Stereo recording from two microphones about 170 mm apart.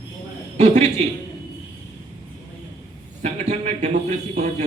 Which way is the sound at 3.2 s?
40° right (ahead or behind).